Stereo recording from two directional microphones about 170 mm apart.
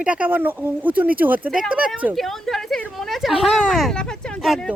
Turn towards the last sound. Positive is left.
turn(degrees=0)  # may be behind; listen again after turning